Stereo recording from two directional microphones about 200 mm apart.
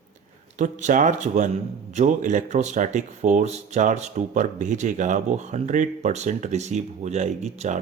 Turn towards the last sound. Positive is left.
turn(degrees=-35)  # may be behind; listen again after turning